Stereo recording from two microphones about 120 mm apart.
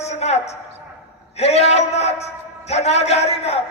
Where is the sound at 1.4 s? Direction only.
60° left (ahead or behind).